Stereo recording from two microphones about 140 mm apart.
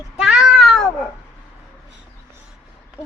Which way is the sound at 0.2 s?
5° right (ahead or behind).